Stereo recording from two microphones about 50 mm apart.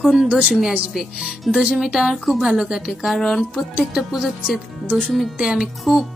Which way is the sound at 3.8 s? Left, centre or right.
Centre.